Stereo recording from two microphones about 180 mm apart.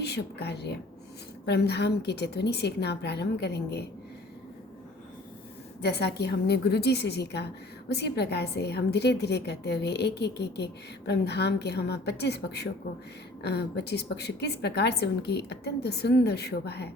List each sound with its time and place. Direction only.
0.0 s a woman's voice: 65° left (ahead or behind)
5.8 s a woman's voice: 65° left (ahead or behind)